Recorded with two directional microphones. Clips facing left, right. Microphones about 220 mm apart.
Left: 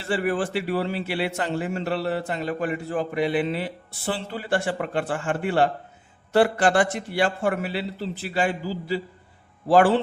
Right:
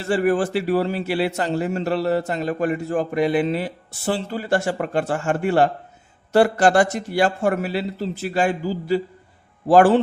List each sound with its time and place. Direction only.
0.0 s a man's voice: 45° right (ahead or behind)